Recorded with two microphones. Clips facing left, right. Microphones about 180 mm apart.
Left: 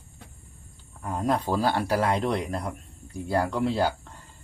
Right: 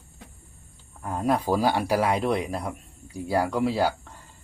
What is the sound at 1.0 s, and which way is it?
Speech, 5° right (ahead or behind).